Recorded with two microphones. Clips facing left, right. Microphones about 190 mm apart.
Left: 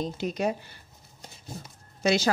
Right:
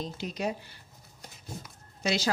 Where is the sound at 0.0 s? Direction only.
50° left (ahead or behind).